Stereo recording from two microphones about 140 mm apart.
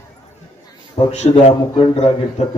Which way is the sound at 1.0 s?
50° left (ahead or behind).